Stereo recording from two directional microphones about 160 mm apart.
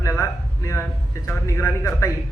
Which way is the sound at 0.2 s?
15° left (ahead or behind).